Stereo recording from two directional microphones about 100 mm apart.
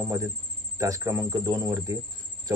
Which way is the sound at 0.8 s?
35° right (ahead or behind).